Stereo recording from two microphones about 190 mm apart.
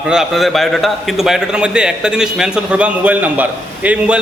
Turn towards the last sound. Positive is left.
turn(degrees=-5)  # may be behind; listen again after turning